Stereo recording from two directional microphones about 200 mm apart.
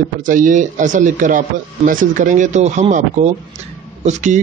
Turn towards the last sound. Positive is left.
turn(degrees=-35)  # may be behind; listen again after turning